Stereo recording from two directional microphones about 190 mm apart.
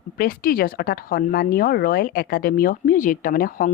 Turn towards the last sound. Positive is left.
turn(degrees=50)  # may be behind; listen again after turning